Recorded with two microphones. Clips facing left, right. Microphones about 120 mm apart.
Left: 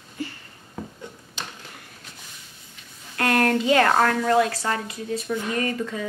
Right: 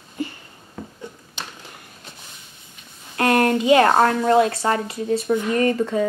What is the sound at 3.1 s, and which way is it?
Speech, 25° right (ahead or behind).